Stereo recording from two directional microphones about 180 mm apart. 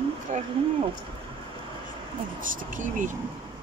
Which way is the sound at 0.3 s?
40° right (ahead or behind).